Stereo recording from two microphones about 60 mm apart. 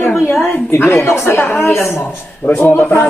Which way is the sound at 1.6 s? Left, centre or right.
Left.